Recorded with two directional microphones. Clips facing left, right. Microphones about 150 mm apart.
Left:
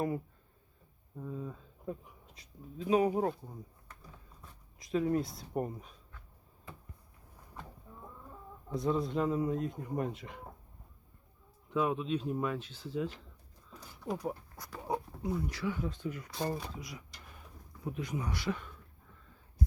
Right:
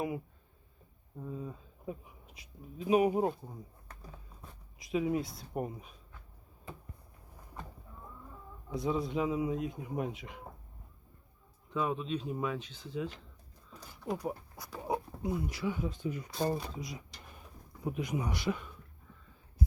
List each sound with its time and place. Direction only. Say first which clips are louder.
1.2 s speech: even; 5° right (ahead or behind)
4.8 s speech: left 1 dB; 10° right (ahead or behind)
8.7 s speech: left 1 dB; centre (ahead or behind)
11.7 s speech: left 2 dB; 5° left (ahead or behind); by 18.7 s 15° right (ahead or behind)